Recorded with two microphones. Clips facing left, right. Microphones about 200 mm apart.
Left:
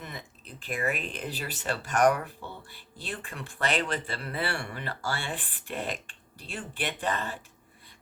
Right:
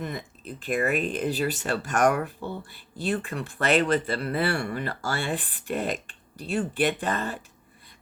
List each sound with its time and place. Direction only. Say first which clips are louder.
0.0 s speech: right 9 dB; 45° right (ahead or behind)